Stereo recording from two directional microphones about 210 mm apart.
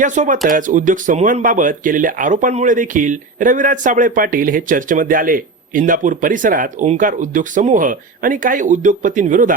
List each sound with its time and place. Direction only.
0.0 s speech: 35° right (ahead or behind)